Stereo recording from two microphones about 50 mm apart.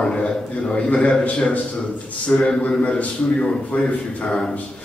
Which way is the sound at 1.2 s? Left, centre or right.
Left.